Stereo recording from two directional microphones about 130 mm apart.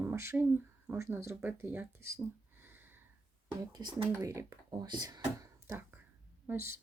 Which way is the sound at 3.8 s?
35° right (ahead or behind).